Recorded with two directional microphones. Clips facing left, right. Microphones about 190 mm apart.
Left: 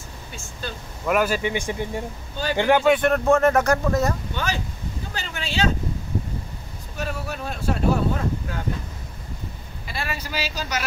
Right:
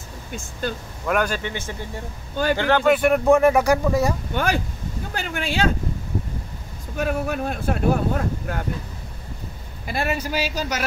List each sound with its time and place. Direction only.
1.0 s speech: 5° left (ahead or behind)
2.8 s speech: 5° right (ahead or behind)
3.1 s speech: 15° right (ahead or behind)
4.3 s speech: 50° right (ahead or behind)
5.1 s a sound: 55° right (ahead or behind)
7.0 s speech: 55° right (ahead or behind)
9.8 s speech: 50° right (ahead or behind)